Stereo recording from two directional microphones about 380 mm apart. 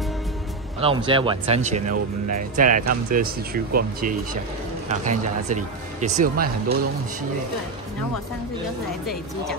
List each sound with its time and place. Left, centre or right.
0.7 s speech: centre